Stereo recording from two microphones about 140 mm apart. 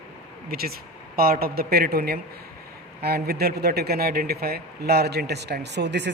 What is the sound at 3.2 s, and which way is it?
A man's voice, 90° right.